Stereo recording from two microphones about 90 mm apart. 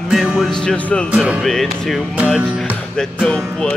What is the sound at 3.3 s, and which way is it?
Music, 10° left (ahead or behind).